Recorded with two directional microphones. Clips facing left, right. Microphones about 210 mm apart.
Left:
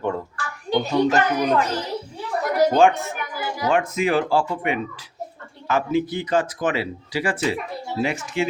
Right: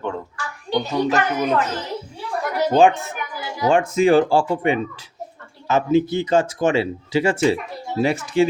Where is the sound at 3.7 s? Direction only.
30° right (ahead or behind).